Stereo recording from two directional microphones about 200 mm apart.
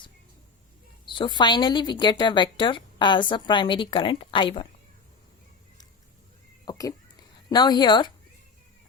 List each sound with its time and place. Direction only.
1.0 s a woman's voice: 25° left (ahead or behind)
6.7 s a woman's voice: 15° left (ahead or behind)